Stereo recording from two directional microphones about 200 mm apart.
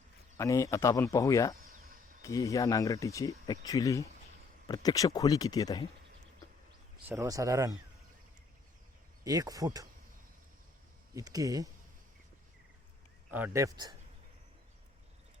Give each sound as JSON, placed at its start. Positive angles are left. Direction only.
{"t": 0.3, "sound": "speech", "side_deg": 15}
{"t": 7.1, "sound": "speech", "side_deg": -15}
{"t": 9.2, "sound": "speech", "side_deg": -20}
{"t": 11.1, "sound": "speech", "side_deg": -20}
{"t": 13.3, "sound": "speech", "side_deg": -10}